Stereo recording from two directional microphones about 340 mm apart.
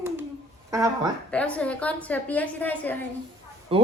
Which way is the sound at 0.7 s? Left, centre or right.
Centre.